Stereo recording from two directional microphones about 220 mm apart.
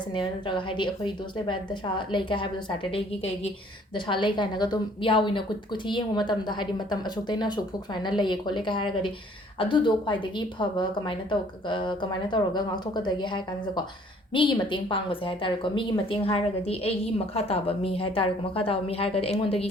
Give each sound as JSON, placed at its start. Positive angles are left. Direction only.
{"t": 0.1, "sound": "a woman's voice", "side_deg": 20}